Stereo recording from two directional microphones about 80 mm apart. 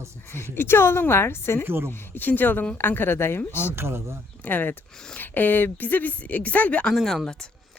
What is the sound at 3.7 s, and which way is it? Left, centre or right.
Speech, right.